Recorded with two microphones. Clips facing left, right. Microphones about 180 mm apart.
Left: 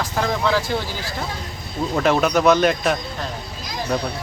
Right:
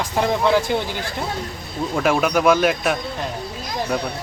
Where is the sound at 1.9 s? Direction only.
10° right (ahead or behind).